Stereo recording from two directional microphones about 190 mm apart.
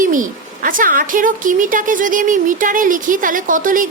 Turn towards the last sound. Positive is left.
turn(degrees=-45)  # may be behind; listen again after turning